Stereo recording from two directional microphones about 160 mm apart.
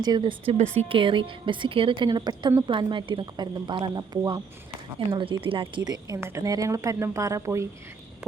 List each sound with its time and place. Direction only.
0.0 s a woman's voice: 30° right (ahead or behind)